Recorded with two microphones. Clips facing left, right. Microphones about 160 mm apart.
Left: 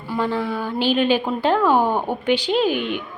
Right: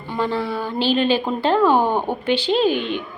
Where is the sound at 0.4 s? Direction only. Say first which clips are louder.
Even; 10° right (ahead or behind).